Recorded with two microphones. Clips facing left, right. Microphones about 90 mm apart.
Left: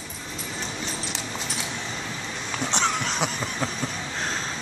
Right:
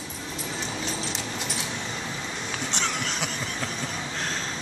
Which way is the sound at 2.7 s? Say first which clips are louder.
Left 6 dB; 25° left (ahead or behind).